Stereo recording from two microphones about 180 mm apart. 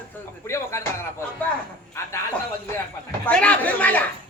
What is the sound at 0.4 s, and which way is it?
Speech, 15° left (ahead or behind).